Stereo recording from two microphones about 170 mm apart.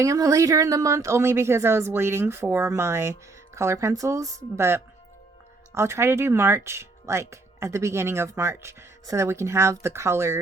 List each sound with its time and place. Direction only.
0.0 s speech: 20° right (ahead or behind)